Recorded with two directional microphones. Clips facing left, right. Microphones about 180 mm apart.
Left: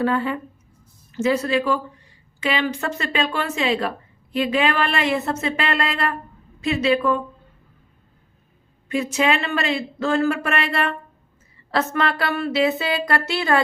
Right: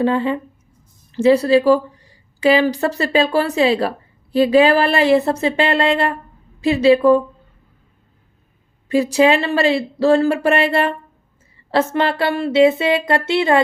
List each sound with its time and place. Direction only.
0.0 s speech: 25° right (ahead or behind)
8.9 s speech: 35° right (ahead or behind)